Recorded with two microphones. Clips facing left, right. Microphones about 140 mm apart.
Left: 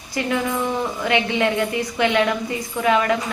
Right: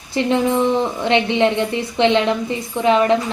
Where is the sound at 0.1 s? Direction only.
25° right (ahead or behind).